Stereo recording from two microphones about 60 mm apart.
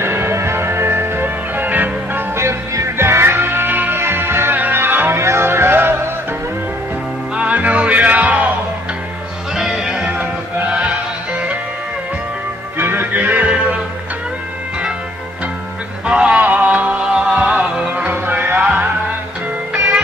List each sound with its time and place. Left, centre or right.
0.0 s music: right
2.3 s music: right
3.0 s music: right
7.3 s music: right
9.6 s music: centre
12.7 s music: right
16.1 s music: centre
17.9 s music: right
19.7 s music: centre